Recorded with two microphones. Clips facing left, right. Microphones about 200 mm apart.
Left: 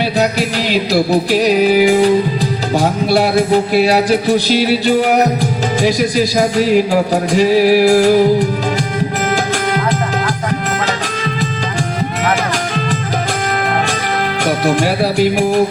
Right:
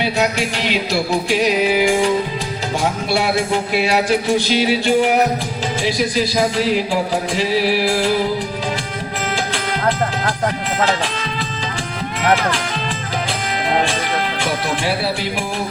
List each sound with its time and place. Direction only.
0.0 s a man's voice: 35° left (ahead or behind)
5.8 s music: 45° left (ahead or behind)
14.4 s speech: 45° left (ahead or behind)